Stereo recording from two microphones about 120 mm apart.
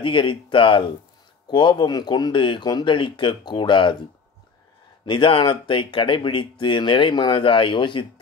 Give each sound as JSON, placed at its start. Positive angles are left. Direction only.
{"t": 0.0, "sound": "speech", "side_deg": 45}
{"t": 5.0, "sound": "speech", "side_deg": 45}